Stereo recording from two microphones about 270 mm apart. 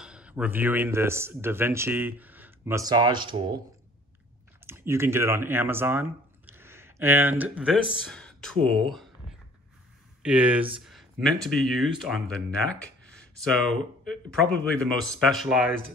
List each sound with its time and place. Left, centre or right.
0.0 s speech: centre
4.6 s speech: centre
10.9 s speech: centre